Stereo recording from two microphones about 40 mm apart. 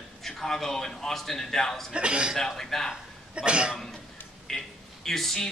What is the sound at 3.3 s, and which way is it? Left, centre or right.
Speech, right.